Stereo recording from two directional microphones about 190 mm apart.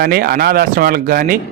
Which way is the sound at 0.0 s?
55° right (ahead or behind).